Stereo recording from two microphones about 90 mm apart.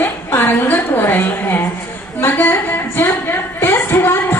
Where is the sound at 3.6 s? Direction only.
25° left (ahead or behind).